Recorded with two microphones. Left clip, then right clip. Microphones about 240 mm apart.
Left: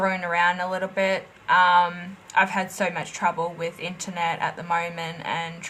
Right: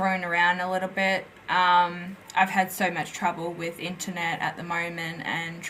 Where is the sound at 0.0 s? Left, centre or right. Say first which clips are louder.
Left 1 dB; left.